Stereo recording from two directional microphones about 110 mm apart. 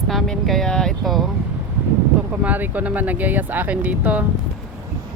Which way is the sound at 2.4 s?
15° right (ahead or behind).